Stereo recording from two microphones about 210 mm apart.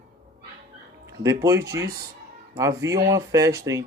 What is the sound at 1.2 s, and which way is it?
Speech, 15° right (ahead or behind).